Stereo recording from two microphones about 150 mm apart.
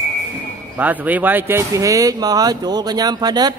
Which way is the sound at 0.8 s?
10° right (ahead or behind).